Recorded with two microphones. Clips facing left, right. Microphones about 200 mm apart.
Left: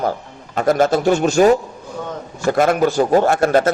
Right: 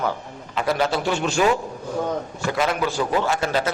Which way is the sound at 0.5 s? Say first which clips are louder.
Left 7 dB; 45° left (ahead or behind).